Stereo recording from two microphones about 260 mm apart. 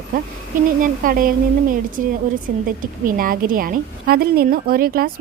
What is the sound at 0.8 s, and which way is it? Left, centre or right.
A woman's voice, right.